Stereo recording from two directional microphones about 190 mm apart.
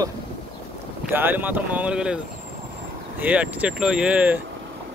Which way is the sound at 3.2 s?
10° right (ahead or behind).